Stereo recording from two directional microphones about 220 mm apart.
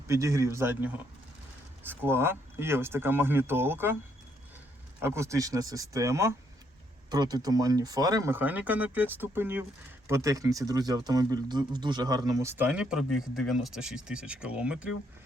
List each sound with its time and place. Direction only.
0.1 s speech: 15° right (ahead or behind)
4.9 s speech: 10° right (ahead or behind)